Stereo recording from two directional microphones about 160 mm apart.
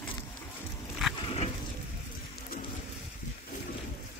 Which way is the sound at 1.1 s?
35° left (ahead or behind).